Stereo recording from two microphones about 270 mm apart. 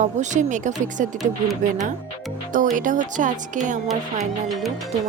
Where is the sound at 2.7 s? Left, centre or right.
Right.